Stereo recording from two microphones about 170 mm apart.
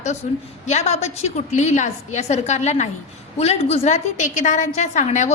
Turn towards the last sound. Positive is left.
turn(degrees=45)  # may be behind; listen again after turning